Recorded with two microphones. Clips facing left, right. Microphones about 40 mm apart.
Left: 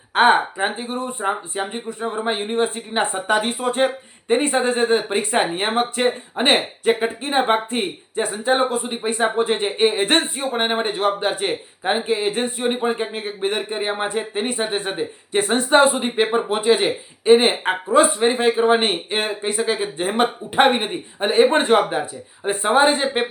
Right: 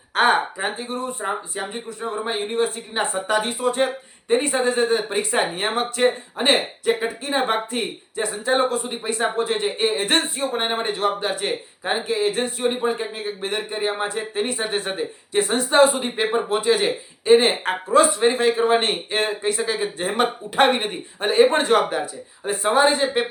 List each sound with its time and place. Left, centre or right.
0.1 s speech: left
12.9 s speech: left; by 15.0 s centre
15.3 s speech: left
16.0 s speech: left
21.5 s speech: left